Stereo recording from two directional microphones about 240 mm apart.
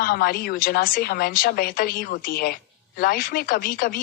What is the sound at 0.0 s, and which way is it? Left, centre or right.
A woman's voice, left.